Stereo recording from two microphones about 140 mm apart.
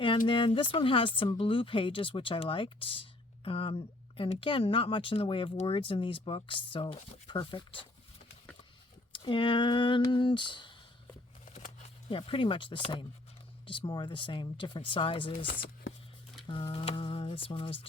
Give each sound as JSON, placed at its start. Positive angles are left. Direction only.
{"t": 0.3, "sound": "speech", "side_deg": 35}
{"t": 9.1, "sound": "speech", "side_deg": 35}
{"t": 11.4, "sound": "a sound", "side_deg": 55}
{"t": 12.1, "sound": "speech", "side_deg": 40}
{"t": 16.5, "sound": "speech", "side_deg": 35}